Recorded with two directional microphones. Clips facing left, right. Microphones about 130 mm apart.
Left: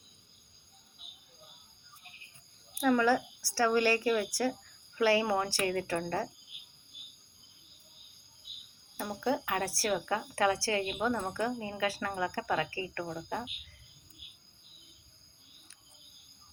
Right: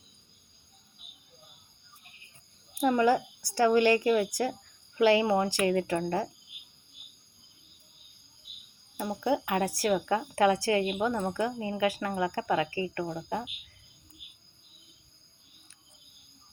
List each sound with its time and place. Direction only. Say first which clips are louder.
2.7 s a child's voice: right 2 dB; 25° right (ahead or behind)
9.0 s speech: right 3 dB; 20° right (ahead or behind)